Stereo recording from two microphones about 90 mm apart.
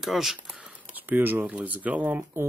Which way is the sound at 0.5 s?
15° right (ahead or behind).